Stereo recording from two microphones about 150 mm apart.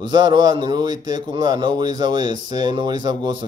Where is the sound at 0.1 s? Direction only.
30° right (ahead or behind).